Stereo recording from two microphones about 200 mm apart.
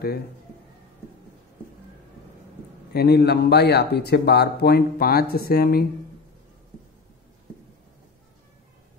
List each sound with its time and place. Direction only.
2.9 s speech: 55° left (ahead or behind)